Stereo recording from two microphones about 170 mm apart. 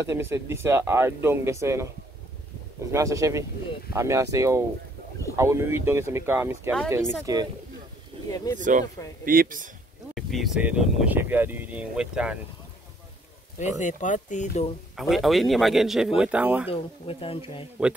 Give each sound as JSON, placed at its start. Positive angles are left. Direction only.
{"t": 0.0, "sound": "speech", "side_deg": -15}
{"t": 2.9, "sound": "speech", "side_deg": -20}
{"t": 8.5, "sound": "speech", "side_deg": -50}
{"t": 10.1, "sound": "speech", "side_deg": 0}
{"t": 13.6, "sound": "speech", "side_deg": 45}
{"t": 15.0, "sound": "speech", "side_deg": 0}
{"t": 16.6, "sound": "speech", "side_deg": 35}